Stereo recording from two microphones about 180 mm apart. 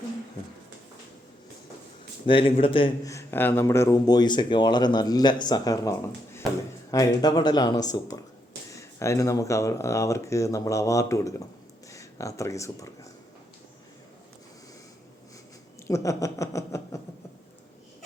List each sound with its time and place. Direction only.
2.2 s speech: 30° left (ahead or behind)
3.1 s speech: 15° left (ahead or behind)
15.9 s speech: 15° left (ahead or behind)